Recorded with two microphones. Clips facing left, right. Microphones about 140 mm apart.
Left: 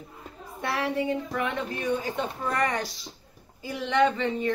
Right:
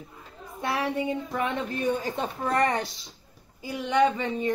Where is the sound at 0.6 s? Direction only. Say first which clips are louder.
Right 1 dB; 15° right (ahead or behind).